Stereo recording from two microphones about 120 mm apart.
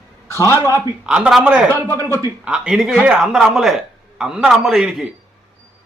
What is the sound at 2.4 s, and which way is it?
A man's voice, 5° right (ahead or behind).